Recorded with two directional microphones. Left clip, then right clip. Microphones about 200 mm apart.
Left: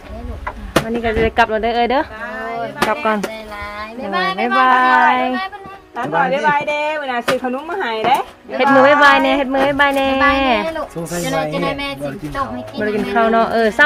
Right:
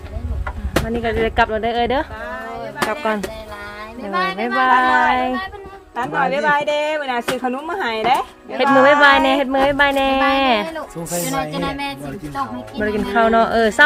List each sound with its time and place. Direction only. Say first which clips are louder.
0.9 s speech: left 2 dB; 10° right (ahead or behind)
2.7 s music: left 3 dB; 5° right (ahead or behind)
3.8 s a sound: left 1 dB; centre (ahead or behind)
4.5 s speech: left 2 dB; 10° right (ahead or behind)
6.0 s speech: left 2 dB; 55° right (ahead or behind)
8.5 s speech: left 2 dB; 15° right (ahead or behind)
11.3 s speech: left 6 dB; centre (ahead or behind)
12.8 s speech: left 1 dB; 15° right (ahead or behind)